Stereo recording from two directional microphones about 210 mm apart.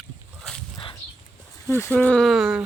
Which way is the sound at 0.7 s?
20° left (ahead or behind).